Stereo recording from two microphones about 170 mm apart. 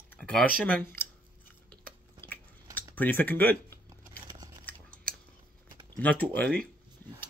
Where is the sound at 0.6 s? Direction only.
10° left (ahead or behind).